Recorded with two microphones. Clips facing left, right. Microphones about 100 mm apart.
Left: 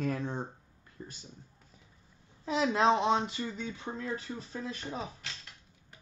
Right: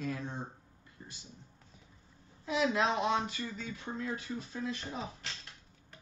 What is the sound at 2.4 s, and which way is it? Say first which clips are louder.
Speech: left 4 dB; 35° left (ahead or behind).